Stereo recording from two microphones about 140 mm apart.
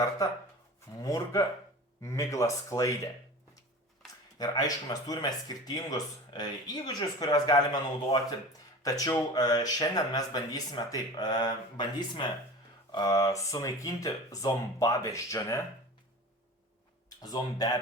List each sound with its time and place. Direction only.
1.0 s speech: 25° left (ahead or behind)
4.4 s speech: 25° left (ahead or behind)
17.2 s speech: 25° left (ahead or behind)